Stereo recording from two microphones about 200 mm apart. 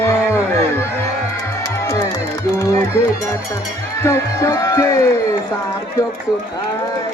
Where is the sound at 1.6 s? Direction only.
15° left (ahead or behind).